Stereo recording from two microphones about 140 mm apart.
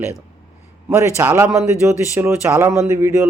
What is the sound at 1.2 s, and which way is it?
Speech, 15° right (ahead or behind).